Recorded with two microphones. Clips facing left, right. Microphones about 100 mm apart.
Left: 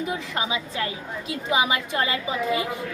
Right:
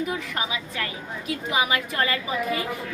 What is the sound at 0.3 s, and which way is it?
A woman's voice, 25° left (ahead or behind).